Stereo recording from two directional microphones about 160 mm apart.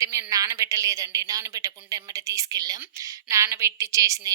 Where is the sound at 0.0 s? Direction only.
20° right (ahead or behind).